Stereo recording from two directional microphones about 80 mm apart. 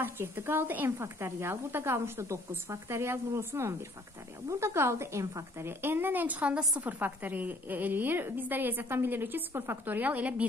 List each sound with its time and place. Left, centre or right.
0.0 s a woman's voice: right
5.7 s a woman's voice: right